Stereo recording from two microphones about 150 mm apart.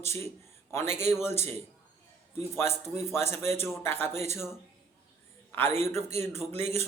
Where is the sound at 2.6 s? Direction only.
15° left (ahead or behind).